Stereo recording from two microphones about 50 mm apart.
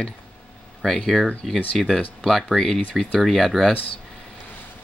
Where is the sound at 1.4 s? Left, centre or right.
Centre.